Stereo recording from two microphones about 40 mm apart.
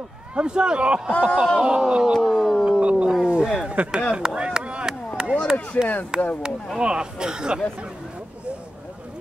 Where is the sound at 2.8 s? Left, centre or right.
Right.